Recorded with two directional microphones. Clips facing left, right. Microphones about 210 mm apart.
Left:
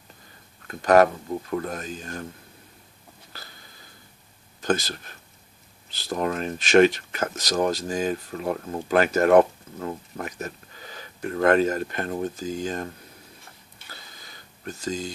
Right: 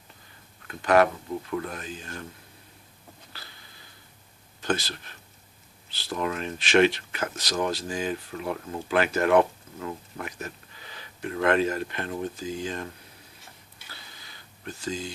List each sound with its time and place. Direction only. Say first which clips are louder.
0.7 s speech: left 3 dB; 40° left (ahead or behind)
4.6 s speech: left 4 dB; 45° left (ahead or behind)
13.9 s a sound: left 3 dB; 45° left (ahead or behind)